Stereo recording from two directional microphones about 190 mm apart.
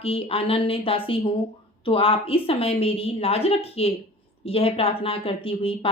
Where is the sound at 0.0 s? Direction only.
30° left (ahead or behind).